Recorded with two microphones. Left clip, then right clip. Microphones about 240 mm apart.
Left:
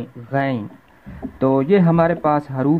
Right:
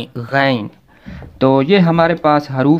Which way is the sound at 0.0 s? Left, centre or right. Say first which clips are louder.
Right 7 dB; centre.